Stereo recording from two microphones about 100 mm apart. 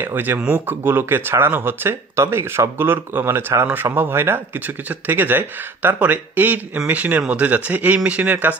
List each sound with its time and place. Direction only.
0.0 s speech: 20° right (ahead or behind)